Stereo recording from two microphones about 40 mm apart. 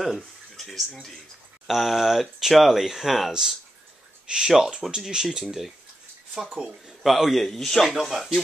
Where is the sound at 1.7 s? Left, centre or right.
Centre.